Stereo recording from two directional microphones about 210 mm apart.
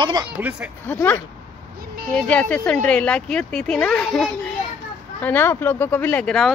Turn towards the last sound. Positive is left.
turn(degrees=5)  # may be behind; listen again after turning